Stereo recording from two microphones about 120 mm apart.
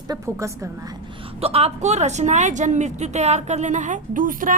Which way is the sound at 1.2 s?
55° right (ahead or behind).